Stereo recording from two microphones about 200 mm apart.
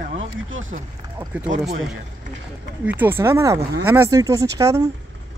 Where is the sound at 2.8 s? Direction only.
10° right (ahead or behind).